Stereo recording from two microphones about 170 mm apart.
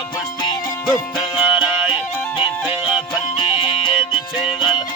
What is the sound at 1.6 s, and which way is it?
Music, 5° right (ahead or behind).